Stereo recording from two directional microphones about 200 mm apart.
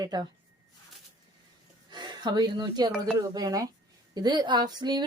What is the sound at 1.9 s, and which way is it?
A woman's voice, 20° right (ahead or behind).